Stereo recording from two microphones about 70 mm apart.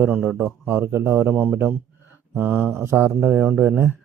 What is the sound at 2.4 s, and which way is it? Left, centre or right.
Speech, right.